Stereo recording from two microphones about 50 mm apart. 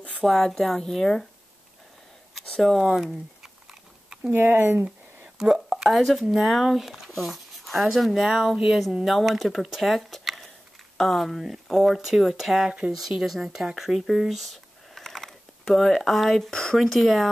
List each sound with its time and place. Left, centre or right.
0.2 s a woman's voice: centre
2.6 s speech: centre
4.3 s speech: right
4.8 s a sound: centre
5.5 s speech: centre